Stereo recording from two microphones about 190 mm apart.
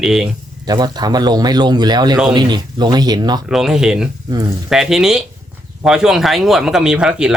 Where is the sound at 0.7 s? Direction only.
20° right (ahead or behind).